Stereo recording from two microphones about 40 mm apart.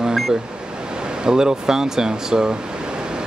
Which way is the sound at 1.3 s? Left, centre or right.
Centre.